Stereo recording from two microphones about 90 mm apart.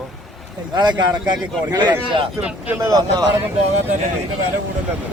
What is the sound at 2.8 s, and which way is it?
Speech, 45° right (ahead or behind).